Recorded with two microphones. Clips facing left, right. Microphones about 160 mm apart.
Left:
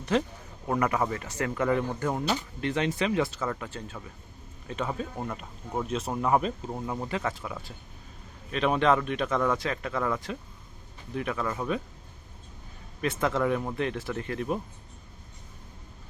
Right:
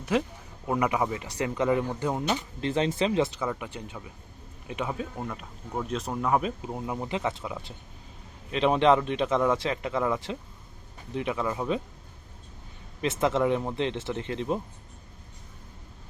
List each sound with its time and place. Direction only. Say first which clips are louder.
0.0 s a man's voice: even; 5° right (ahead or behind)
2.6 s speech: right 3 dB; 30° right (ahead or behind); by 5.0 s 10° right (ahead or behind)
5.1 s speech: left 1 dB; centre (ahead or behind)
6.6 s a man's voice: even; 10° right (ahead or behind)
13.0 s a man's voice: right 2 dB; 20° right (ahead or behind)